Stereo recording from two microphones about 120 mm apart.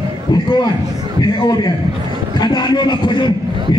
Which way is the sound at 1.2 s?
35° left (ahead or behind).